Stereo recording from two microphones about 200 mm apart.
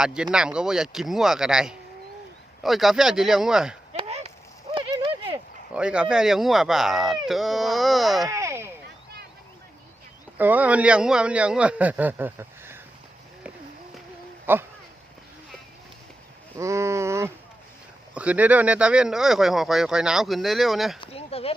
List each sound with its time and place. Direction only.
0.0 s speech: 5° right (ahead or behind)
3.9 s a sound: 30° right (ahead or behind)
4.7 s horse: 25° right (ahead or behind)
5.7 s speech: 5° right (ahead or behind)
8.3 s a sound: 15° right (ahead or behind)
10.3 s speech: 10° right (ahead or behind)
14.5 s speech: 10° right (ahead or behind)
16.6 s speech: 15° right (ahead or behind)
21.0 s a sound: 30° left (ahead or behind)